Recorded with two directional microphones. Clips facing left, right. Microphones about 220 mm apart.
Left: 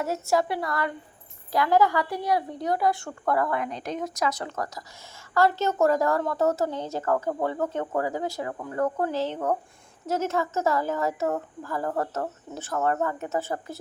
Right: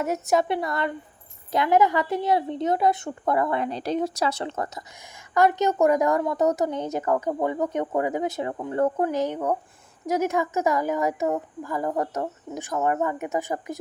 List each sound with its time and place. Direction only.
0.0 s a woman's voice: 20° right (ahead or behind)
9.0 s speech: 15° right (ahead or behind)